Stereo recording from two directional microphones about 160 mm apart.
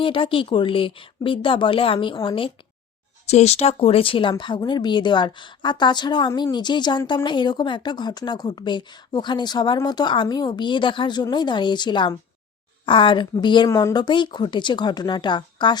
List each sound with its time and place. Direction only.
0.0 s speech: 35° left (ahead or behind)
3.2 s speech: 40° left (ahead or behind)